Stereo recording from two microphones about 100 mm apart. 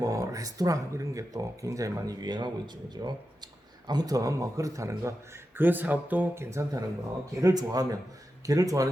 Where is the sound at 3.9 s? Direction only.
40° right (ahead or behind).